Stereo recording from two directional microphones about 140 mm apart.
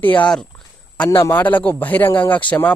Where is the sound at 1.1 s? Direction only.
20° left (ahead or behind).